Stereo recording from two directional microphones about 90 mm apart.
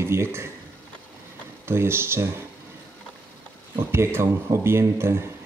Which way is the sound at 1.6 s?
25° right (ahead or behind).